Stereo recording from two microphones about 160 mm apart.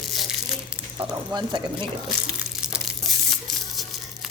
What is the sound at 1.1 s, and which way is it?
Speech, 30° right (ahead or behind).